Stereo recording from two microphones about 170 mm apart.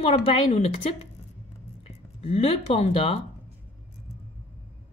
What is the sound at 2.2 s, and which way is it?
A woman's voice, 35° left (ahead or behind).